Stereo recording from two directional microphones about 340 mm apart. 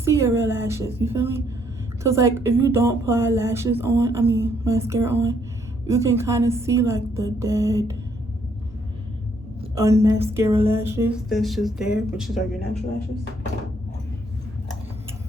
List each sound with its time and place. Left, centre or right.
0.0 s a woman's voice: centre
9.6 s speech: centre